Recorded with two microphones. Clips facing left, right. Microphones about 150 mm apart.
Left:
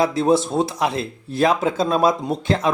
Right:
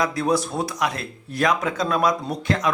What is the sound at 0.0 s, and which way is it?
Speech, 25° left (ahead or behind).